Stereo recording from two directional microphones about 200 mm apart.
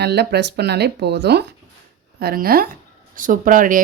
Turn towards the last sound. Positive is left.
turn(degrees=-45)  # may be behind; listen again after turning